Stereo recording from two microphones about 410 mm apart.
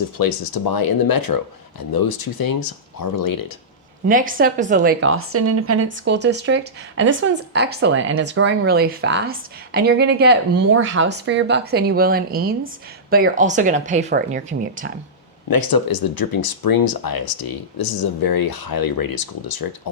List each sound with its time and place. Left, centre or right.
0.2 s speech: left
4.1 s speech: centre
15.4 s speech: left